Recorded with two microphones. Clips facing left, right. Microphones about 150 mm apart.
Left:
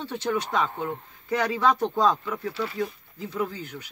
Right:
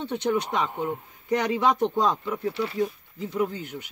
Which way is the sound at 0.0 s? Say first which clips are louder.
Right 2 dB; 20° right (ahead or behind).